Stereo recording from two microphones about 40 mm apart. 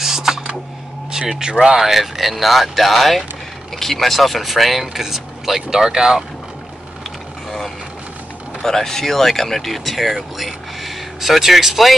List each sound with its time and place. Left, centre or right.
0.0 s computer keyboard: centre
1.1 s speech: centre
1.8 s speech: centre
8.6 s speech: centre